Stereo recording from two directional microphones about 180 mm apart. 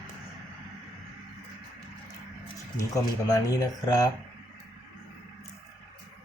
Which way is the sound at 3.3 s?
20° left (ahead or behind).